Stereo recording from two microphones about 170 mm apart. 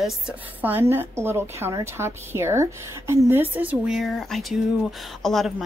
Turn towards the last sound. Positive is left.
turn(degrees=0)  # may be behind; listen again after turning